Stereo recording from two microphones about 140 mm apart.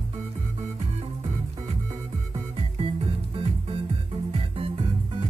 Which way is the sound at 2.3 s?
50° right (ahead or behind).